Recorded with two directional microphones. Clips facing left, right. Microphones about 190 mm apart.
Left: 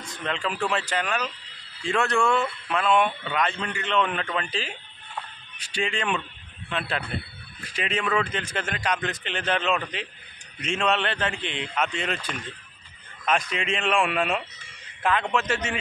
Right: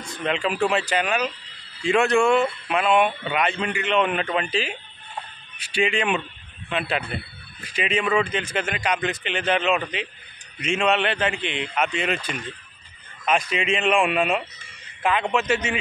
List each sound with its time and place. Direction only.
0.0 s speech: 10° right (ahead or behind)
4.5 s speech: 80° right
5.8 s speech: 10° right (ahead or behind)
11.4 s a man's voice: 70° right (ahead or behind)
13.2 s speech: 5° right (ahead or behind)
15.4 s speech: 5° right (ahead or behind)